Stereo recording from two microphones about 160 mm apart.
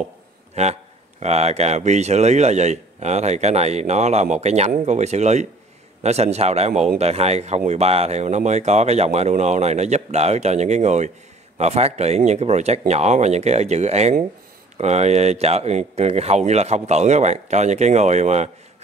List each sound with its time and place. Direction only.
1.2 s speech: 40° right (ahead or behind)